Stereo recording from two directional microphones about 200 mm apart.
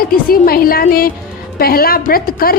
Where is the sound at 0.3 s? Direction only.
50° left (ahead or behind).